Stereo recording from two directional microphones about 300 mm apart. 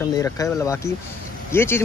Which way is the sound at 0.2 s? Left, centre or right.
Centre.